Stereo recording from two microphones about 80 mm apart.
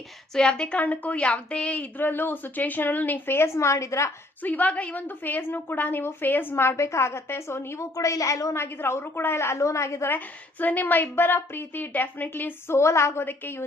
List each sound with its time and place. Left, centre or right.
0.3 s a woman's voice: centre; by 4.1 s left
4.4 s a woman's voice: centre; by 8.5 s left
8.5 s a woman's voice: left
10.1 s a woman's voice: left